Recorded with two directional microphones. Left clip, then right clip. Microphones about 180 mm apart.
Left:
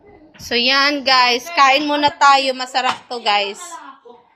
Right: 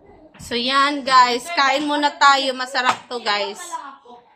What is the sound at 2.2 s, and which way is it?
A woman's voice, 15° left (ahead or behind).